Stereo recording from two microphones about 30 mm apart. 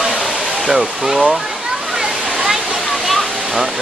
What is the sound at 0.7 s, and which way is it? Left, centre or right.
Speech, centre.